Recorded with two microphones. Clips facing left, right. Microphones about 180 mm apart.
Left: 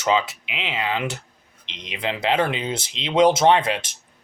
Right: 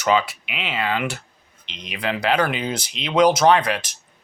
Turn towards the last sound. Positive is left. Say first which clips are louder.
# right 1 dB
turn(degrees=25)  # may be behind; listen again after turning